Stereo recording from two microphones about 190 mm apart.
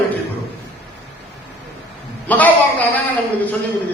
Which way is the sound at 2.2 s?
10° left (ahead or behind).